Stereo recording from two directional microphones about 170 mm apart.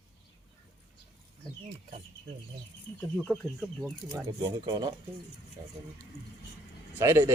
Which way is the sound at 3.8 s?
15° right (ahead or behind).